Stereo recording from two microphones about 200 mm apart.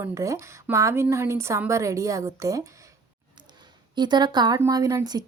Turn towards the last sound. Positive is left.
turn(degrees=-20)  # may be behind; listen again after turning